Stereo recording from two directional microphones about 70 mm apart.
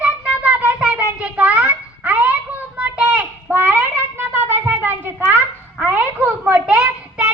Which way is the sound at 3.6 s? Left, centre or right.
Right.